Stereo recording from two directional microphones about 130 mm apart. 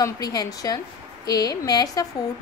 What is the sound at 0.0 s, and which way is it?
A woman's voice, 30° left (ahead or behind).